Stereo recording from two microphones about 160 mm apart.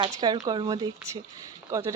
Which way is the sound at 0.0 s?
25° right (ahead or behind).